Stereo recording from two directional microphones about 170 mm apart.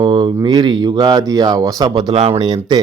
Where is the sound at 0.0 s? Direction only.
30° right (ahead or behind).